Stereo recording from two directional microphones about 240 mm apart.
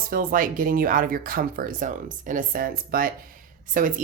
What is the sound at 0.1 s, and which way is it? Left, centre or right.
Speech, right.